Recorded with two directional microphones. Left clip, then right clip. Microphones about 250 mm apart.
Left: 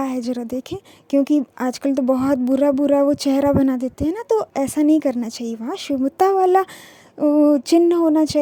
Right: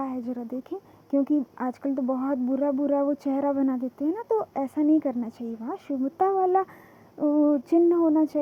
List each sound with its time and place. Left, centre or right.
0.0 s speech: left